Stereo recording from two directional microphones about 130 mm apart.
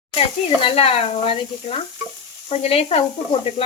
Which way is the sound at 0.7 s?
50° left (ahead or behind).